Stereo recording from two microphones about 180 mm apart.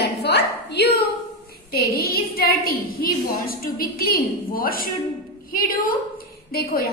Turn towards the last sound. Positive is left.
turn(degrees=55)  # may be behind; listen again after turning